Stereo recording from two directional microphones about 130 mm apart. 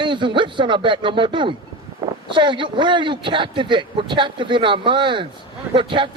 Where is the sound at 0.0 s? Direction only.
40° right (ahead or behind).